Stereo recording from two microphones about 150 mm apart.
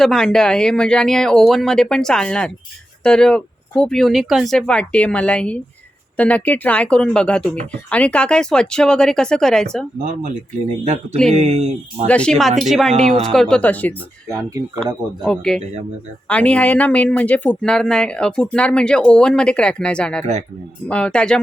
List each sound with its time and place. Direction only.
0.0 s speech: 5° left (ahead or behind)
10.8 s speech: 50° right (ahead or behind)
12.0 s speech: 5° left (ahead or behind)
15.2 s speech: 5° left (ahead or behind)